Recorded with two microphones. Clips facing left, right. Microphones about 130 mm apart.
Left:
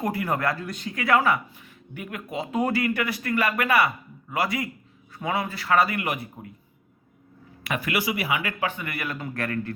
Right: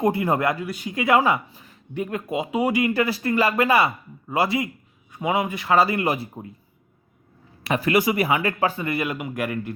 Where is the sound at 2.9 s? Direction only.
30° right (ahead or behind).